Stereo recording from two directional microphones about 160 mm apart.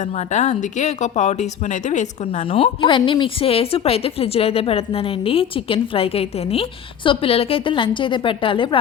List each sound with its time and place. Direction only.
0.0 s speech: 50° left (ahead or behind)